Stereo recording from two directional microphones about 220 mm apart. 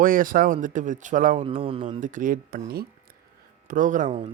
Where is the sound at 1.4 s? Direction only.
25° right (ahead or behind).